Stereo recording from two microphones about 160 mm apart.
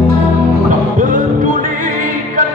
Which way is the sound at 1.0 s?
55° right (ahead or behind).